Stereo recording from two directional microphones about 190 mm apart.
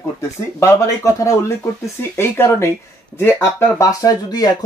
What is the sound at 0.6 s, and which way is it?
Speech, 15° left (ahead or behind).